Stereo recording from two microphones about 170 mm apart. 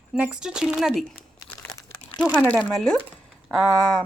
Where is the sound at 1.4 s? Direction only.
20° left (ahead or behind).